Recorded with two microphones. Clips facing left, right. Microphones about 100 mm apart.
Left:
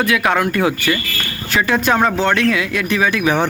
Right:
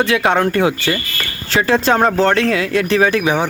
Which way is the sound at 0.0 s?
25° right (ahead or behind).